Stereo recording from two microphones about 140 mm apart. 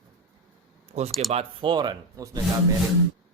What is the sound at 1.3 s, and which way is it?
Speech, 40° right (ahead or behind).